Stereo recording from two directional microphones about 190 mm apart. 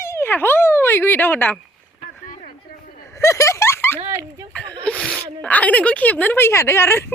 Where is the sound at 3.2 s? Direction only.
15° left (ahead or behind).